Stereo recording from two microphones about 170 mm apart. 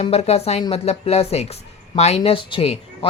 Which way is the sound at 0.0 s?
40° left (ahead or behind).